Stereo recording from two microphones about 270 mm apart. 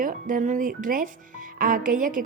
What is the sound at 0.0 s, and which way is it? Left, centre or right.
A woman's voice, right.